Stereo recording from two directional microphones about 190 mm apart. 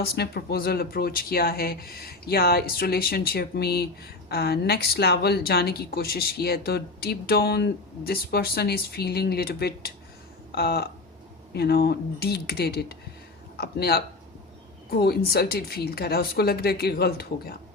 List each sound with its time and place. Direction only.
0.0 s speech: 55° left (ahead or behind)